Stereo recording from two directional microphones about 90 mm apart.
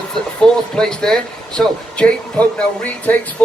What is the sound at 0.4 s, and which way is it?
Speech, 5° left (ahead or behind).